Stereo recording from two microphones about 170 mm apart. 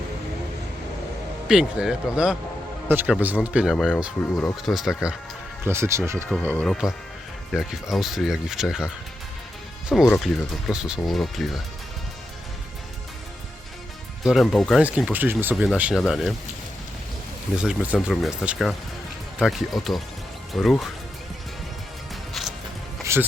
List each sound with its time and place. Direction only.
1.5 s speech: 5° right (ahead or behind)
5.6 s speech: 15° right (ahead or behind)
6.2 s speech: 10° left (ahead or behind)
9.9 s speech: 5° left (ahead or behind)
14.3 s speech: centre (ahead or behind)
16.0 s speech: centre (ahead or behind)
17.6 s speech: 5° right (ahead or behind)
22.1 s music: centre (ahead or behind)
23.1 s speech: 15° right (ahead or behind)